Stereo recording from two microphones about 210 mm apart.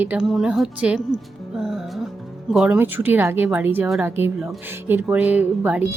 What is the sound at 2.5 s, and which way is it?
A woman's voice, 5° right (ahead or behind).